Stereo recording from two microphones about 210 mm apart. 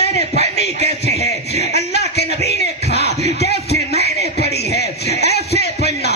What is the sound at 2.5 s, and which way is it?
Music, 50° left (ahead or behind).